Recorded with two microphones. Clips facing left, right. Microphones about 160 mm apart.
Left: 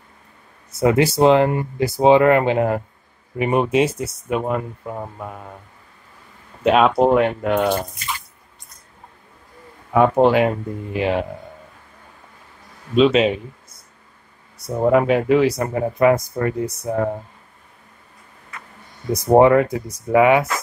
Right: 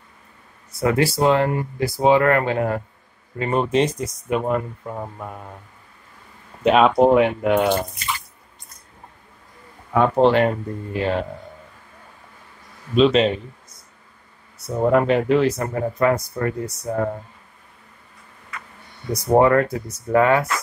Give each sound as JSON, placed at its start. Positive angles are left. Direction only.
{"t": 0.7, "sound": "speech", "side_deg": 20}
{"t": 6.6, "sound": "speech", "side_deg": 0}
{"t": 9.9, "sound": "speech", "side_deg": 10}
{"t": 12.9, "sound": "speech", "side_deg": 5}
{"t": 14.7, "sound": "speech", "side_deg": 5}
{"t": 19.1, "sound": "speech", "side_deg": 20}